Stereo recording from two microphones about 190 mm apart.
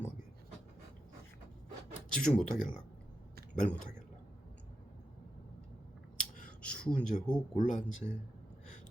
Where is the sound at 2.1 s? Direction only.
5° left (ahead or behind).